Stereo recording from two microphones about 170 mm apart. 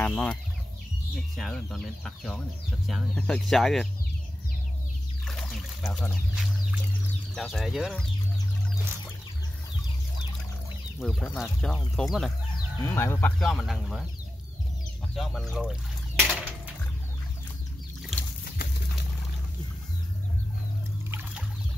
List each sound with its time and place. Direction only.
0.0 s speech: 5° left (ahead or behind)
5.2 s speech: centre (ahead or behind)
11.0 s speech: centre (ahead or behind)
12.8 s speech: 15° left (ahead or behind)
13.4 s speech: centre (ahead or behind)
15.1 s speech: centre (ahead or behind)
16.2 s a sound: 10° right (ahead or behind)
21.1 s trickle: 10° right (ahead or behind)